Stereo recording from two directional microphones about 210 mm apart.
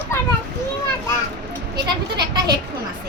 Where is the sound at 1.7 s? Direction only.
20° right (ahead or behind).